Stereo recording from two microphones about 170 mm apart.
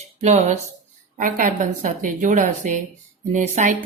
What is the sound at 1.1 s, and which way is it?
Speech, 50° right (ahead or behind).